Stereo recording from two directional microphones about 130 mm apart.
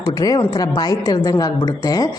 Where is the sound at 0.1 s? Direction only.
30° left (ahead or behind).